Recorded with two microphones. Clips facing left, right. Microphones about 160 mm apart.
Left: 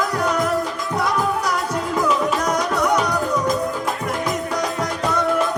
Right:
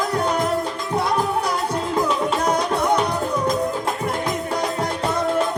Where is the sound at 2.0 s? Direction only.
30° right (ahead or behind).